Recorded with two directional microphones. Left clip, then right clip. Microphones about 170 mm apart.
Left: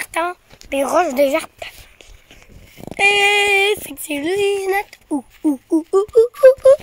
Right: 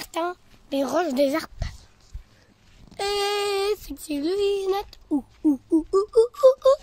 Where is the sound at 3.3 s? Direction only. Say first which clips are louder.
Left 10 dB; 20° left (ahead or behind).